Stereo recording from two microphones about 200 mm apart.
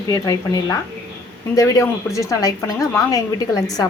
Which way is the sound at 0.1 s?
20° left (ahead or behind).